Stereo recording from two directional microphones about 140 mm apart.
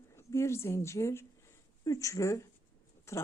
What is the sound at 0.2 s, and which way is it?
A woman's voice, 20° left (ahead or behind).